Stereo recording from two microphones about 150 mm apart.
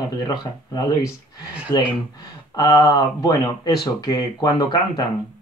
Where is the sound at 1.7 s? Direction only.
25° left (ahead or behind).